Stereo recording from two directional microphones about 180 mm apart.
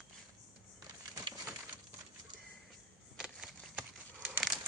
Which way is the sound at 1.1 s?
20° right (ahead or behind).